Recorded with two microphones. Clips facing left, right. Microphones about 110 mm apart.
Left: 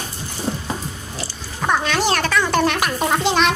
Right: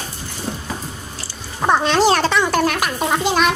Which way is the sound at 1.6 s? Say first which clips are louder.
Right 4 dB; 30° right (ahead or behind).